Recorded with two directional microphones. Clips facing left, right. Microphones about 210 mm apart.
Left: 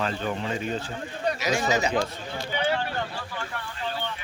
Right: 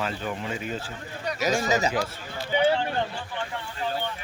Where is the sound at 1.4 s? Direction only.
40° right (ahead or behind).